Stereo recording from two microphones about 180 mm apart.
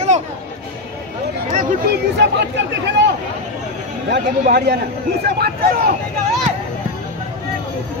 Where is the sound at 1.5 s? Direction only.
65° right (ahead or behind).